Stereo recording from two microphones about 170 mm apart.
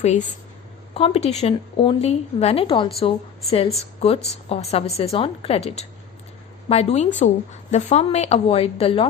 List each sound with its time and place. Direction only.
0.0 s a woman's voice: 45° left (ahead or behind)